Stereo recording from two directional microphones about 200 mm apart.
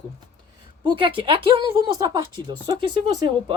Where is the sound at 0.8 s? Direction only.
25° right (ahead or behind).